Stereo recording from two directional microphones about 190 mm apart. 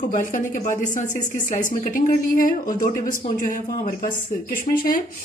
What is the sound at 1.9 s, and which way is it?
Speech, 45° left (ahead or behind).